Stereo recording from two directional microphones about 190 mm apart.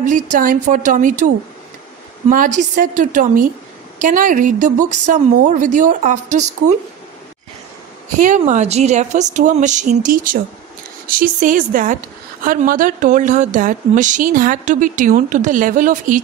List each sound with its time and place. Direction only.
0.0 s speech: 45° right (ahead or behind)
8.2 s a woman's voice: 40° right (ahead or behind)